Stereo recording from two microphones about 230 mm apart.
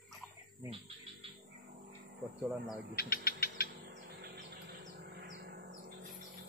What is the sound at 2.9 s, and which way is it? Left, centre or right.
Mechanisms, left.